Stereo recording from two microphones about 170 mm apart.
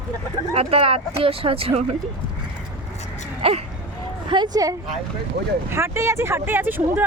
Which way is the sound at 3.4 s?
35° right (ahead or behind).